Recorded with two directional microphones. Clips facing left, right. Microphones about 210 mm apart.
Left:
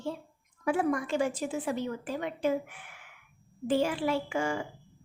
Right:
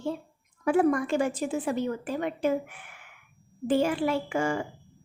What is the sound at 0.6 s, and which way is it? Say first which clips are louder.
A woman's voice: right 5 dB; 50° right (ahead or behind).